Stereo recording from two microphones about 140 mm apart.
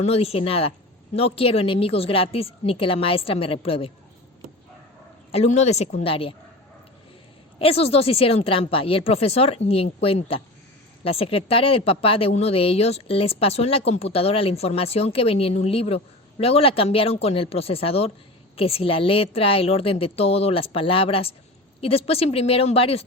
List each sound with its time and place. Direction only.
0.0 s speech: 45° left (ahead or behind)
5.3 s speech: 50° left (ahead or behind)
7.6 s speech: 45° left (ahead or behind)